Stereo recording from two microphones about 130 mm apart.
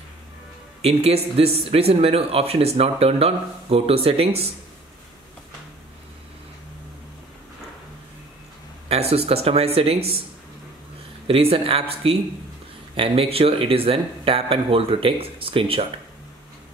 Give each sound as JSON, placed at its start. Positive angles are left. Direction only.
{"t": 0.8, "sound": "speech", "side_deg": -50}
{"t": 8.8, "sound": "speech", "side_deg": -50}
{"t": 11.2, "sound": "speech", "side_deg": -45}